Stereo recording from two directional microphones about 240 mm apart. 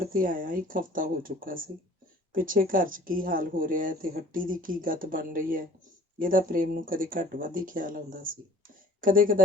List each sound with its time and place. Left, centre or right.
0.0 s speech: right